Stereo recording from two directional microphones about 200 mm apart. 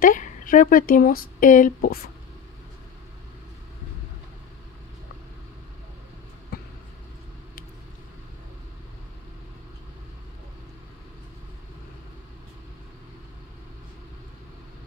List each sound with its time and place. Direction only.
0.0 s speech: 40° left (ahead or behind)
6.5 s vehicle: 50° left (ahead or behind)